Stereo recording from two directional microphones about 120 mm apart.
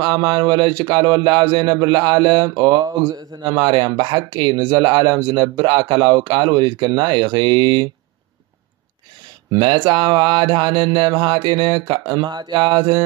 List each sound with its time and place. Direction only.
0.0 s speech: 40° right (ahead or behind)
9.6 s speech: 40° right (ahead or behind)